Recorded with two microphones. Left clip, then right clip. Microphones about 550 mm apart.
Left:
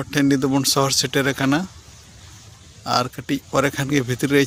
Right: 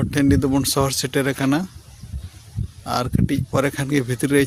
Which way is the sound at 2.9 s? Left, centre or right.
Left.